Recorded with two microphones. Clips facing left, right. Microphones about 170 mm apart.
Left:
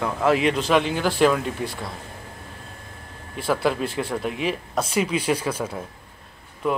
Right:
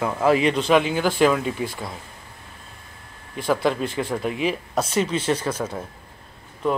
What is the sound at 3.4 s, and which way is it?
Speech, 5° left (ahead or behind).